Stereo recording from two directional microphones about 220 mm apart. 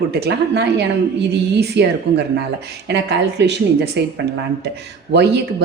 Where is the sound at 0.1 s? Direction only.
50° right (ahead or behind).